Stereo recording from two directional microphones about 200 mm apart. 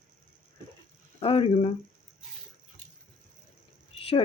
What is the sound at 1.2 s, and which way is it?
Speech, 30° left (ahead or behind).